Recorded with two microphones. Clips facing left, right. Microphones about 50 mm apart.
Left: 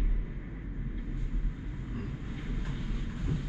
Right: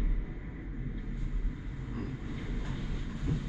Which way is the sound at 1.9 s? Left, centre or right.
Centre.